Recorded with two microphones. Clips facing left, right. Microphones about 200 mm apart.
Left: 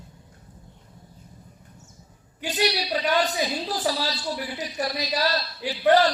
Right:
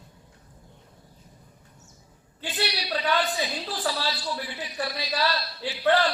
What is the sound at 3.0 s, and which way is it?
A woman's voice, 40° left (ahead or behind).